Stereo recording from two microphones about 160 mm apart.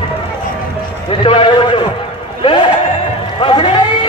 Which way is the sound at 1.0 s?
35° left (ahead or behind).